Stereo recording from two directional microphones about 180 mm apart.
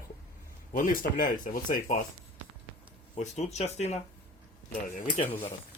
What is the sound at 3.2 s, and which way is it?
Speech, 40° left (ahead or behind).